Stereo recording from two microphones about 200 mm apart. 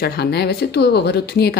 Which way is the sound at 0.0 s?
50° left (ahead or behind).